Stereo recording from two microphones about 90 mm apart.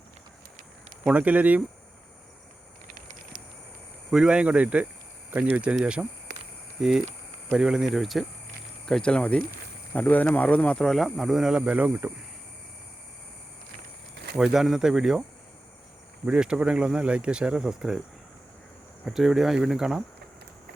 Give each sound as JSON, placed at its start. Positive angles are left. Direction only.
{"t": 1.0, "sound": "speech", "side_deg": -15}
{"t": 4.1, "sound": "speech", "side_deg": -10}
{"t": 7.5, "sound": "speech", "side_deg": -5}
{"t": 8.9, "sound": "speech", "side_deg": 10}
{"t": 14.3, "sound": "speech", "side_deg": -5}
{"t": 16.2, "sound": "speech", "side_deg": -10}
{"t": 19.0, "sound": "speech", "side_deg": -5}